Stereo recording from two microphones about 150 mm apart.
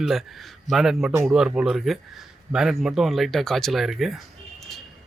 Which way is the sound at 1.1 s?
15° right (ahead or behind).